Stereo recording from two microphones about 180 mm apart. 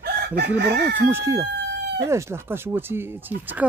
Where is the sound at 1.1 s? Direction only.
15° right (ahead or behind).